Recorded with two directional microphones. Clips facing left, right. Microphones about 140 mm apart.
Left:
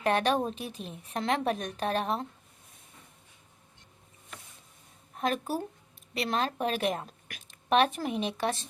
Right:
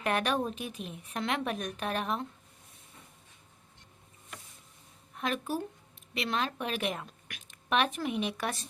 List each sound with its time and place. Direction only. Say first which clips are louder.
0.0 s a woman's voice: left 3 dB; 30° left (ahead or behind)
5.1 s a woman's voice: left 3 dB; 35° left (ahead or behind)